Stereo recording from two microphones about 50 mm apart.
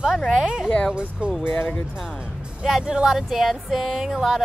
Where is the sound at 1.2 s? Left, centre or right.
Right.